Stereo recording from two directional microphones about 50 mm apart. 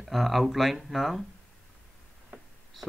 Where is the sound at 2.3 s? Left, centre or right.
Right.